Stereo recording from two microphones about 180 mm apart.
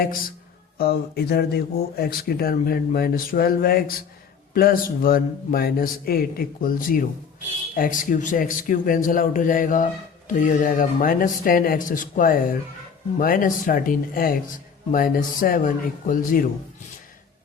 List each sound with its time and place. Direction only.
0.8 s speech: 60° left (ahead or behind)